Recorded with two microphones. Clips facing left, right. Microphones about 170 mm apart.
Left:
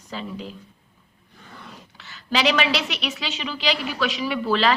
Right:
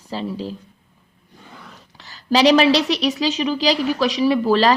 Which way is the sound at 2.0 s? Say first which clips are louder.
Right 7 dB; 35° right (ahead or behind).